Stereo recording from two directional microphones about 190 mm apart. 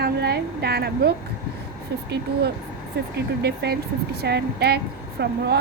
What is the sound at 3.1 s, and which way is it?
A woman's voice, 60° right (ahead or behind).